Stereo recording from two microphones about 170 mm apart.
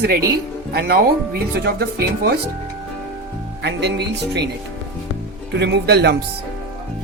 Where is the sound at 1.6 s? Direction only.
65° right (ahead or behind).